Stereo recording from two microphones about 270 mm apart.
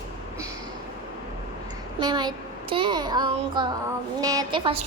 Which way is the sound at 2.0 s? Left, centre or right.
Centre.